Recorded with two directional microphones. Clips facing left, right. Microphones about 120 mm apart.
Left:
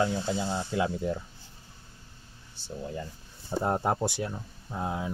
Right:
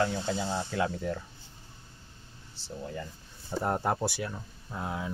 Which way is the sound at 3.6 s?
20° left (ahead or behind).